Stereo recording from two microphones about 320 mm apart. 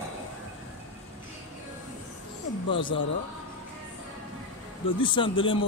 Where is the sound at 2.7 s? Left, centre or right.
Centre.